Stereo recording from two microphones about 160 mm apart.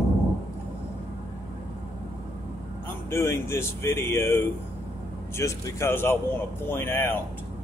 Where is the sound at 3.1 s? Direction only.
15° left (ahead or behind).